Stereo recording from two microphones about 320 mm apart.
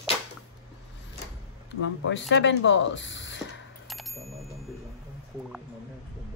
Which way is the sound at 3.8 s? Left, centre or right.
Centre.